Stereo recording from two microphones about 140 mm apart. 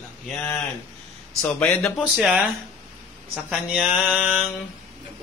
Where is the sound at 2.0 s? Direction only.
5° right (ahead or behind).